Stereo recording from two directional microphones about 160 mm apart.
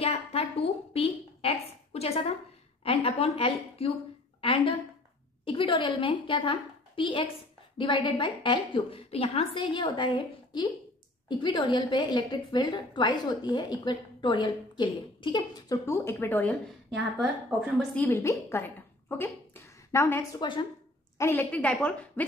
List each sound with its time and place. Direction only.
0.0 s a woman's voice: 40° left (ahead or behind); by 16.5 s 10° left (ahead or behind)
17.2 s a woman's voice: 5° right (ahead or behind)
17.9 s a woman's voice: 15° left (ahead or behind)
21.2 s a woman's voice: 15° left (ahead or behind)